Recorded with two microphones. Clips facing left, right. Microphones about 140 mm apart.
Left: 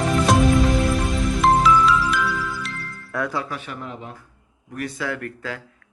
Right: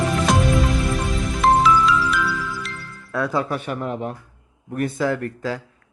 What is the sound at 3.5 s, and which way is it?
Speech, 50° right (ahead or behind).